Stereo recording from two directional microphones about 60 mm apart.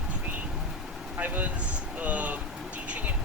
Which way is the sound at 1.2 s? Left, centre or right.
Right.